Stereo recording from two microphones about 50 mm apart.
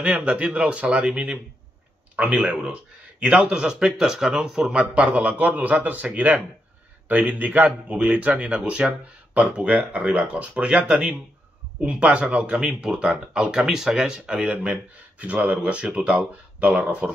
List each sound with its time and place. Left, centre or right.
0.0 s speech: right
14.5 s speech: right